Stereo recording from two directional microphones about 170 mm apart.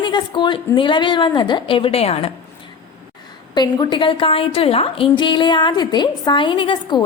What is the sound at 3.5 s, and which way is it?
A woman's voice, 25° left (ahead or behind).